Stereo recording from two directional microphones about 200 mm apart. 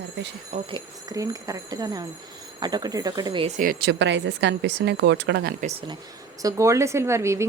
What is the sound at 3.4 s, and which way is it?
Speech, 40° right (ahead or behind).